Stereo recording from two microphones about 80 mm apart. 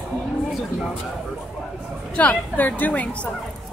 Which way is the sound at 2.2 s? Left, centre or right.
Centre.